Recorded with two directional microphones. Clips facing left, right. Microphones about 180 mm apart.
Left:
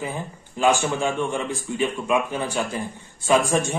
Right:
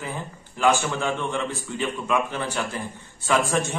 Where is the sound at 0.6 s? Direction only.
15° left (ahead or behind).